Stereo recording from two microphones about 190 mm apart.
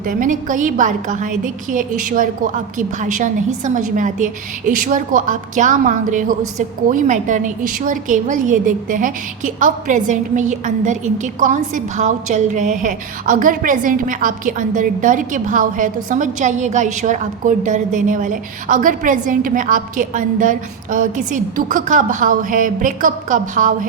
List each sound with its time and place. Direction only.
0.0 s a woman's voice: 45° right (ahead or behind)